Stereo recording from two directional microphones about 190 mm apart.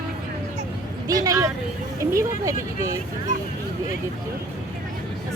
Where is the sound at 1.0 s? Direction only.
20° right (ahead or behind).